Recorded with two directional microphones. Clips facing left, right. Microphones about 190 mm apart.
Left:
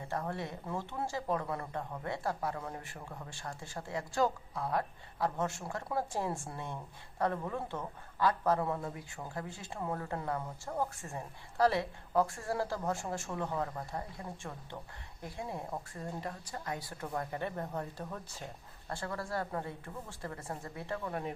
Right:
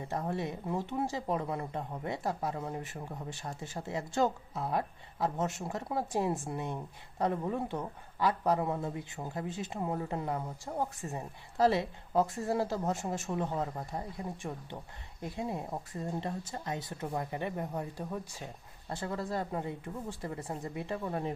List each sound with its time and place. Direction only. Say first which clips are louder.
0.1 s speech: right 3 dB; 20° right (ahead or behind)